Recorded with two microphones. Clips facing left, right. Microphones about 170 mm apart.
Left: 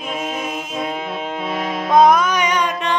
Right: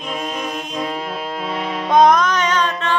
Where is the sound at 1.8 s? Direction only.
5° left (ahead or behind).